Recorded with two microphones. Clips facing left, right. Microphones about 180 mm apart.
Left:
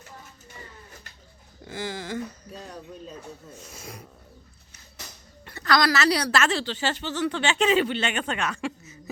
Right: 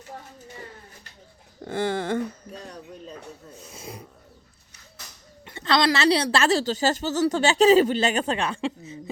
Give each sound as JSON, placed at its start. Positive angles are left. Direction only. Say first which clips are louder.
{"t": 1.6, "sound": "speech", "louder": "right 8 dB", "side_deg": -60}
{"t": 3.5, "sound": "a woman's voice", "louder": "right 2 dB", "side_deg": -30}
{"t": 5.5, "sound": "a woman's voice", "louder": "right 1 dB", "side_deg": -25}